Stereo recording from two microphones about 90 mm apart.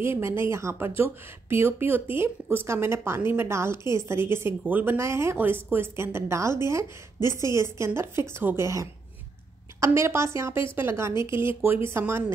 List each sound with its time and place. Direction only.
0.0 s a woman's voice: 30° right (ahead or behind)